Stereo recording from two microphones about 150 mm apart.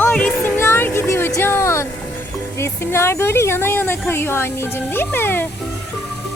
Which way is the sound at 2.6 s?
15° left (ahead or behind).